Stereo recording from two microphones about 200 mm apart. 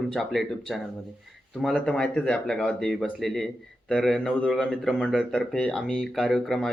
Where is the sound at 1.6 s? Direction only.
Centre (ahead or behind).